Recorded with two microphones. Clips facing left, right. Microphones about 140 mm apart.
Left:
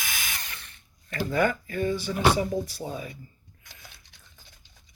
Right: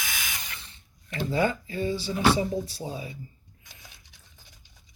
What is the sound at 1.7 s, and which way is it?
Speech, 55° left (ahead or behind).